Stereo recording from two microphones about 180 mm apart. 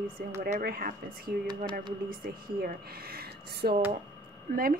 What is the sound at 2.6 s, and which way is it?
Speech, 55° right (ahead or behind).